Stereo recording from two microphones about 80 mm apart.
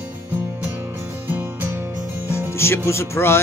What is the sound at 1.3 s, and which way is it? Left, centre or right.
Music, right.